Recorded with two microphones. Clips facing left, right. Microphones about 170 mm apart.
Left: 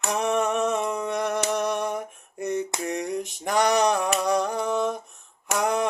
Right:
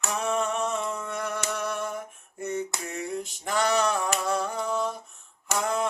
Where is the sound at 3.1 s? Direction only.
15° left (ahead or behind).